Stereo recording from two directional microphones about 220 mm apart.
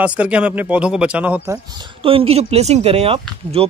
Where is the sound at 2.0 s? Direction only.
25° right (ahead or behind).